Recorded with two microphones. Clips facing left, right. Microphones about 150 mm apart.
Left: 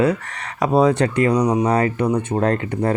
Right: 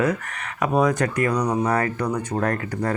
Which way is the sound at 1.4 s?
15° left (ahead or behind).